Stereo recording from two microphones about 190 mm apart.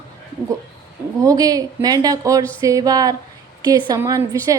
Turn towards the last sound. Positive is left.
turn(degrees=-20)  # may be behind; listen again after turning